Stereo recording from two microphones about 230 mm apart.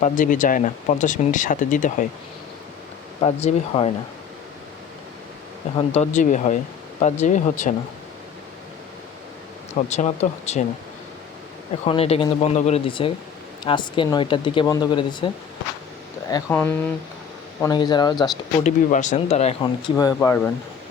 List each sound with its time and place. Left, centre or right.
0.0 s speech: left
3.2 s speech: left
5.9 s speech: left
9.7 s speech: left
11.9 s speech: left
16.3 s speech: centre
18.6 s speech: left; by 20.5 s centre